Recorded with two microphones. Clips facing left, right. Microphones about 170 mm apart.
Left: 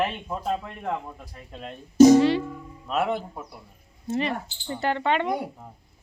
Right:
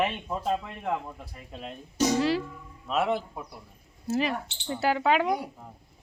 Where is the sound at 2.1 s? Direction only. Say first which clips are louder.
Left 6 dB; centre (ahead or behind).